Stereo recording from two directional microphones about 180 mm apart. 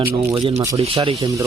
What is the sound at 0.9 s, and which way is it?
Speech, 30° right (ahead or behind).